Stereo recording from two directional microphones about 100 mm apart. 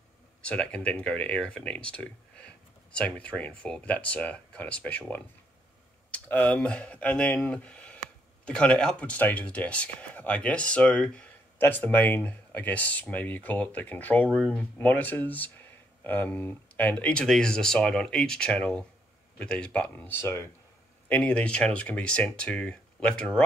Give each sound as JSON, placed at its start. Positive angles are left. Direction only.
{"t": 0.4, "sound": "speech", "side_deg": 10}
{"t": 21.1, "sound": "speech", "side_deg": 15}